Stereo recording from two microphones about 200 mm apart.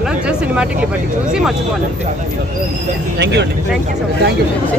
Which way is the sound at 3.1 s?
55° right (ahead or behind).